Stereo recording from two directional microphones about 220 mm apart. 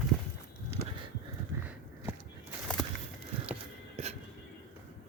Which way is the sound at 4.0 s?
30° right (ahead or behind).